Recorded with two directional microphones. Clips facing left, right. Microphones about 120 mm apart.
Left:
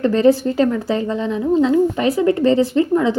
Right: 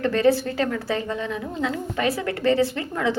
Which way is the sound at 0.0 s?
20° left (ahead or behind).